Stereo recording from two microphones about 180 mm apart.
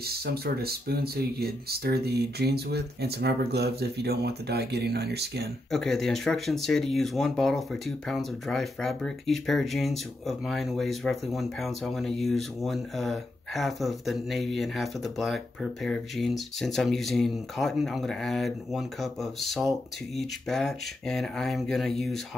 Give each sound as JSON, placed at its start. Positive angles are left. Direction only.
{"t": 0.0, "sound": "speech", "side_deg": -60}
{"t": 5.7, "sound": "speech", "side_deg": 0}